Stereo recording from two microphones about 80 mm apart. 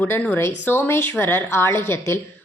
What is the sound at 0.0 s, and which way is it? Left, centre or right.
A woman's voice, left.